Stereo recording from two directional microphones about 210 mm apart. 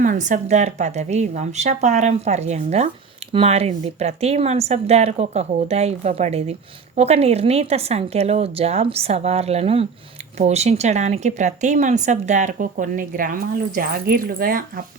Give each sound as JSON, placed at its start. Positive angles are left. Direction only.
{"t": 0.0, "sound": "a woman's voice", "side_deg": -40}